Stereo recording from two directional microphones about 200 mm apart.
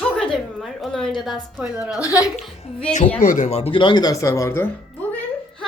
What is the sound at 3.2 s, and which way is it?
A woman's voice, 40° left (ahead or behind).